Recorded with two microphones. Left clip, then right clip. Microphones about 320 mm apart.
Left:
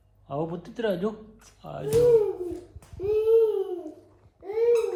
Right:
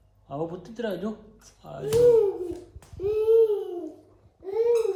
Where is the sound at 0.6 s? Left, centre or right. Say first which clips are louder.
Left 3 dB; centre.